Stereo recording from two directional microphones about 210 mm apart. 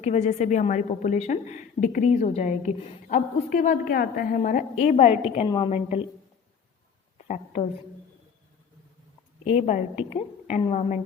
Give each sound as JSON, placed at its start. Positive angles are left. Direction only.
{"t": 0.0, "sound": "a woman's voice", "side_deg": 30}
{"t": 7.3, "sound": "a woman's voice", "side_deg": 35}
{"t": 9.6, "sound": "a woman's voice", "side_deg": 35}